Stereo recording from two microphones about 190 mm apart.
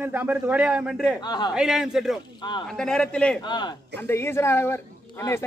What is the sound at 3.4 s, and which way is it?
A man's voice, 25° left (ahead or behind).